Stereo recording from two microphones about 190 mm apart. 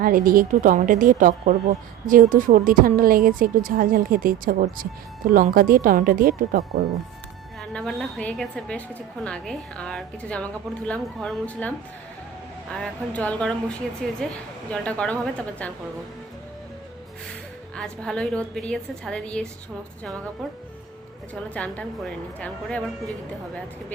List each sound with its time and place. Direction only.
0.0 s a woman's voice: 50° right (ahead or behind)
7.6 s a woman's voice: centre (ahead or behind)
12.7 s a woman's voice: 5° left (ahead or behind)
17.7 s a woman's voice: 5° left (ahead or behind)
21.5 s speech: 5° left (ahead or behind)